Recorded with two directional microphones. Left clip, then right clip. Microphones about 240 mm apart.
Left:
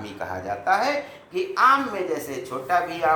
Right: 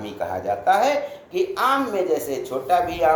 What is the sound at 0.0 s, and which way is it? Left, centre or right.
A man's voice, centre.